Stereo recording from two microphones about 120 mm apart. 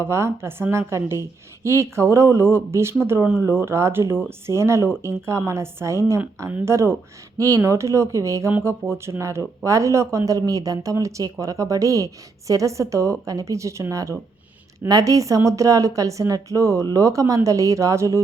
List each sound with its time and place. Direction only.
0.0 s speech: 20° right (ahead or behind)